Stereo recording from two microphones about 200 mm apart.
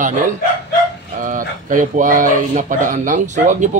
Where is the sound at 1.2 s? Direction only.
40° right (ahead or behind).